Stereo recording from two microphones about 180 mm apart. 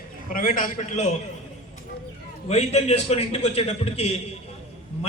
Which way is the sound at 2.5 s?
35° left (ahead or behind).